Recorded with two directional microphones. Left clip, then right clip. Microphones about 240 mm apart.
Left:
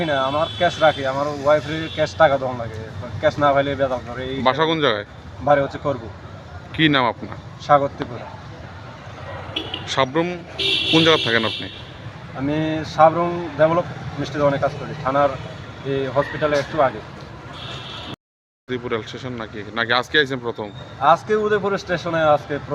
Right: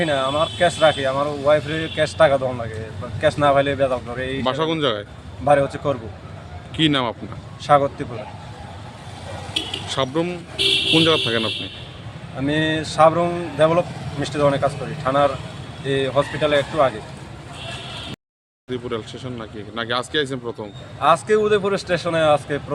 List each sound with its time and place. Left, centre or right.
0.0 s speech: centre
5.5 s speech: centre
6.7 s speech: centre
7.7 s speech: centre
9.8 s speech: centre
12.4 s speech: centre
18.7 s speech: centre
21.0 s speech: centre